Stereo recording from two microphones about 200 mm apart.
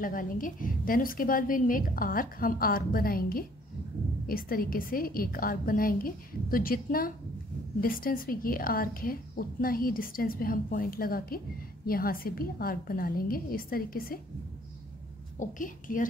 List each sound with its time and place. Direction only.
0.0 s a woman's voice: 45° left (ahead or behind)
15.3 s a woman's voice: 40° left (ahead or behind)